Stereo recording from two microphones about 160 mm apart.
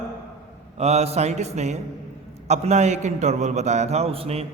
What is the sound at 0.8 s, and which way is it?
A man's voice, 40° right (ahead or behind).